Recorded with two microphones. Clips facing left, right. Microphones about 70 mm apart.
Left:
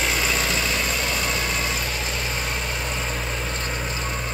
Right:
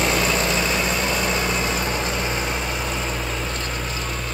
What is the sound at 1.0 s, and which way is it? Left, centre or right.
Vehicle, right.